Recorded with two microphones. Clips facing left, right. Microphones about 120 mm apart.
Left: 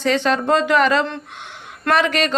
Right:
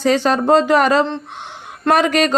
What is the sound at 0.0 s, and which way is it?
A woman's voice, 40° right (ahead or behind).